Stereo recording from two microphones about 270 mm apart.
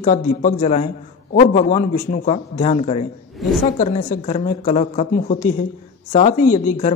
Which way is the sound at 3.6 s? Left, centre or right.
Left.